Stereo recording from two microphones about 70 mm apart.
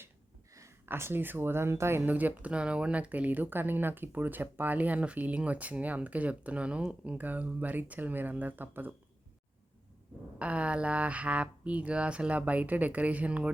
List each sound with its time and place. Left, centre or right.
0.9 s speech: right
2.0 s speech: right
10.3 s speech: centre